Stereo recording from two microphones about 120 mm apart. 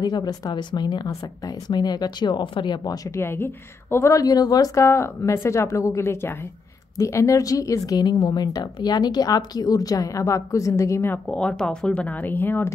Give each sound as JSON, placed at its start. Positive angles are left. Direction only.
{"t": 0.0, "sound": "speech", "side_deg": 35}
{"t": 3.2, "sound": "a woman's voice", "side_deg": 20}
{"t": 11.2, "sound": "speech", "side_deg": 10}